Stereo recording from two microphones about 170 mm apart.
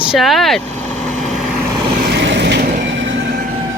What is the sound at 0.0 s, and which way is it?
Vehicle, centre (ahead or behind).